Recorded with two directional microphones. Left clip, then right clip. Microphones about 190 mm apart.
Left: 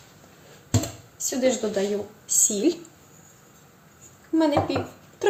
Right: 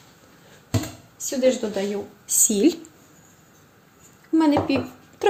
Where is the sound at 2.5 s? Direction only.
50° right (ahead or behind).